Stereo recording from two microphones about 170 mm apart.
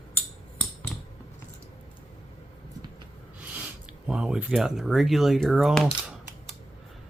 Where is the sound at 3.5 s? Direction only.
5° right (ahead or behind).